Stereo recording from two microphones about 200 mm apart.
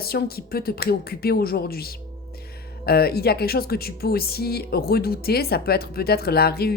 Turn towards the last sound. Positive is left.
turn(degrees=50)  # may be behind; listen again after turning